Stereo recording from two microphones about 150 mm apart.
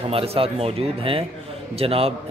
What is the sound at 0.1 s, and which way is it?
A man's voice, 40° right (ahead or behind).